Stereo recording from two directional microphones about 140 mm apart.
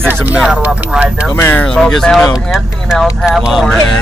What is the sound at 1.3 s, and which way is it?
Speech, 15° left (ahead or behind).